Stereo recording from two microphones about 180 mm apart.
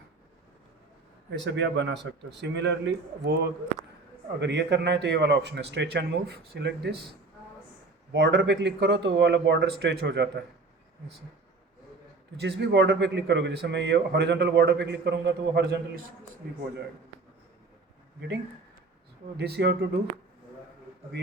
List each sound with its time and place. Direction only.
1.3 s a man's voice: 75° right (ahead or behind)
4.4 s a man's voice: 75° right (ahead or behind)
8.1 s a man's voice: 70° right (ahead or behind)
12.4 s a man's voice: 65° right (ahead or behind)
19.4 s speech: 65° right (ahead or behind)